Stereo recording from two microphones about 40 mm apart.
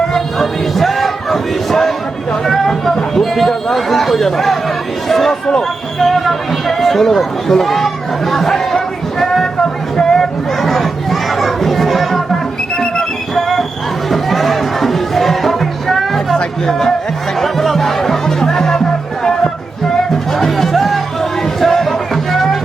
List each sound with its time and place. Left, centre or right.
0.3 s a sound: centre
5.0 s speech: centre
8.3 s chatter: centre
10.0 s crowd: centre
12.7 s a sound: centre
13.3 s a sound: centre
14.1 s music: centre
16.6 s speech: centre
20.3 s music: centre